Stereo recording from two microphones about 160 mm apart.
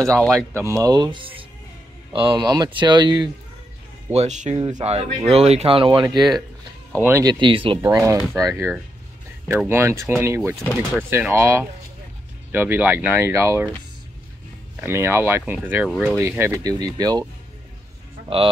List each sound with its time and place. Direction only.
0.0 s speech: 5° left (ahead or behind)
0.6 s speech: 20° right (ahead or behind)
4.1 s speech: 45° right (ahead or behind)
7.0 s speech: 15° right (ahead or behind)
7.3 s speech: 30° right (ahead or behind)
7.8 s speech: 20° right (ahead or behind)
8.2 s speech: centre (ahead or behind)
8.5 s speech: 15° right (ahead or behind)
10.5 s speech: 5° left (ahead or behind)
11.0 s speech: 15° right (ahead or behind)
14.8 s speech: 15° right (ahead or behind)